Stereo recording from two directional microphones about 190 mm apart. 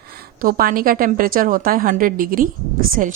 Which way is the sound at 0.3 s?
50° right (ahead or behind).